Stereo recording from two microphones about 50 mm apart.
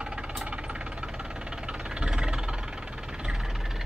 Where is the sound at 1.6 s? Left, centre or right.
Centre.